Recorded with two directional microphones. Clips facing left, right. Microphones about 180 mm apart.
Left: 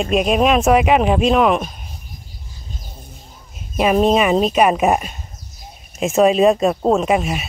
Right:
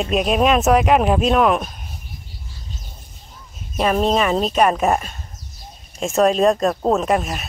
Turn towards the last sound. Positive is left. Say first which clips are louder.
# left 2 dB
turn(degrees=0)  # may be behind; listen again after turning